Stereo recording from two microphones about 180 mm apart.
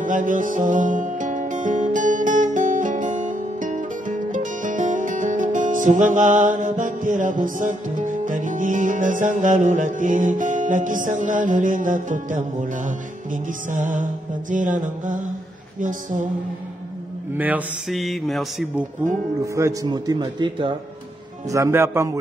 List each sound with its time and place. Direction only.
0.0 s music: 45° right (ahead or behind)
14.5 s mantra: 45° right (ahead or behind)
17.4 s speech: 10° right (ahead or behind)
19.4 s speech: 15° right (ahead or behind)
21.5 s speech: 15° right (ahead or behind)